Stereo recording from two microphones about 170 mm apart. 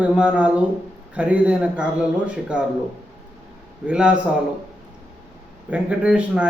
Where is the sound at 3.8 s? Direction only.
5° right (ahead or behind).